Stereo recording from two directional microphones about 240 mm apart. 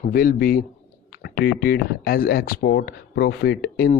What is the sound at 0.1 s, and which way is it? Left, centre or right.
Speech, left.